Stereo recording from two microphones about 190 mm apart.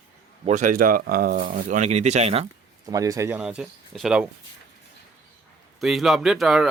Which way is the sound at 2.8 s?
20° right (ahead or behind).